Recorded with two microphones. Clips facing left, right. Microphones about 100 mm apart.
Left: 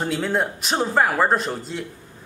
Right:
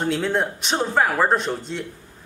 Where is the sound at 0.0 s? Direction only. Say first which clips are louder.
Right 1 dB; centre (ahead or behind).